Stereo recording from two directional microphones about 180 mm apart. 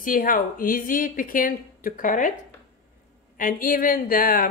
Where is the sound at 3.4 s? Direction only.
50° left (ahead or behind).